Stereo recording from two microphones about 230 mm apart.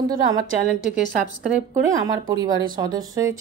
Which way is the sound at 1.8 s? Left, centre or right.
Centre.